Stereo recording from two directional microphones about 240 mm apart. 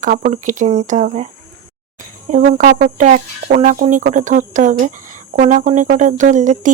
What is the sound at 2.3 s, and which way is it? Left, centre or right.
Speech, right.